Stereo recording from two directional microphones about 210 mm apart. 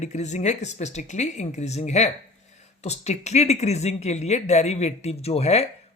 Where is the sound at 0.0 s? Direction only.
35° left (ahead or behind).